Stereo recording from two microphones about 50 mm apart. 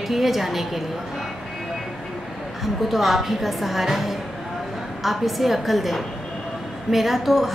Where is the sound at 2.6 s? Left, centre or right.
Centre.